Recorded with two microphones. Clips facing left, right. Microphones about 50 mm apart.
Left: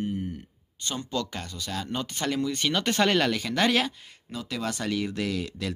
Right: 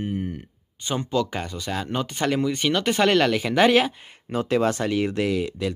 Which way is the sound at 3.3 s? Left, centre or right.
Centre.